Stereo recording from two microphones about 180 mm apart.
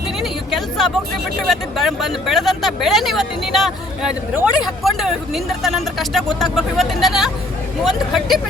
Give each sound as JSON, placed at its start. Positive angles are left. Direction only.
{"t": 0.2, "sound": "vehicle", "side_deg": 0}
{"t": 1.5, "sound": "speech", "side_deg": 0}